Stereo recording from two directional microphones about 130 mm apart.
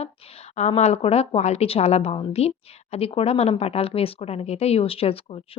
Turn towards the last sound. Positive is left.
turn(degrees=50)  # may be behind; listen again after turning